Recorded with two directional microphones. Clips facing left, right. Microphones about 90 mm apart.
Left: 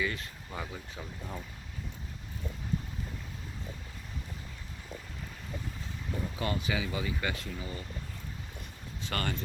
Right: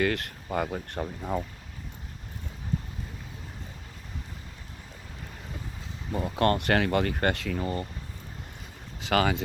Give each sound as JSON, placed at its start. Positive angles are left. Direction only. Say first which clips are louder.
{"t": 0.0, "sound": "speech", "louder": "right 7 dB", "side_deg": -75}
{"t": 6.1, "sound": "speech", "louder": "right 10 dB", "side_deg": -65}
{"t": 7.6, "sound": "speech", "louder": "right 10 dB", "side_deg": -55}
{"t": 9.0, "sound": "speech", "louder": "right 10 dB", "side_deg": -90}